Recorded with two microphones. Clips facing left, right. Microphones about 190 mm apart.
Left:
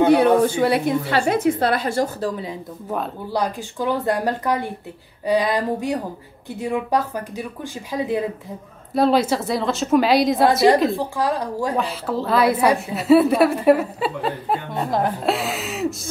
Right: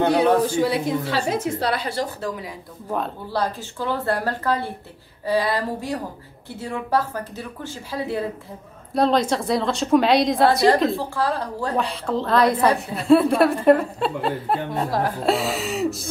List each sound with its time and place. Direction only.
0.1 s a woman's voice: 60° left (ahead or behind)
2.2 s speech: 30° left (ahead or behind)
3.3 s speech: 15° left (ahead or behind)
8.9 s a woman's voice: 5° left (ahead or behind)
11.0 s speech: 15° left (ahead or behind)
11.7 s a woman's voice: 5° left (ahead or behind)